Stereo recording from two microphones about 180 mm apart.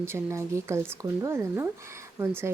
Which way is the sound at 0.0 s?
15° right (ahead or behind).